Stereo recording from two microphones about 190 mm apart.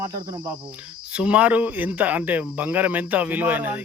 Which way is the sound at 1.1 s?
5° right (ahead or behind).